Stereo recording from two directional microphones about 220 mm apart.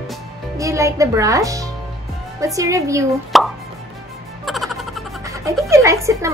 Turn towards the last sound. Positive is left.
turn(degrees=-15)  # may be behind; listen again after turning